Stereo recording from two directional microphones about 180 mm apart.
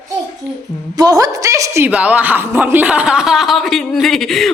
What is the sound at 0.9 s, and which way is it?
A woman's voice, 20° right (ahead or behind).